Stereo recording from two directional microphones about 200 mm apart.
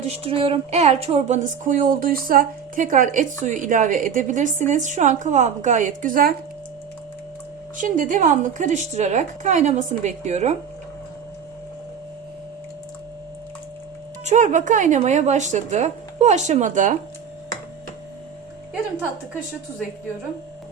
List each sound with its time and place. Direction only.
0.0 s a woman's voice: 30° right (ahead or behind)
7.8 s a woman's voice: 40° right (ahead or behind)
14.3 s a woman's voice: 35° right (ahead or behind)